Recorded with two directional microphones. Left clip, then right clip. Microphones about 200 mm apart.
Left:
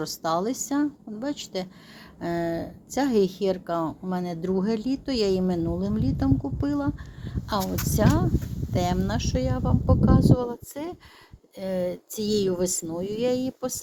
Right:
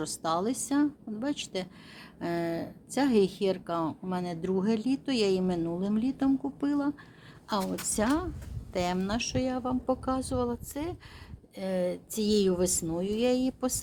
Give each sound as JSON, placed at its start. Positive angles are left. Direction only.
{"t": 0.0, "sound": "speech", "side_deg": 10}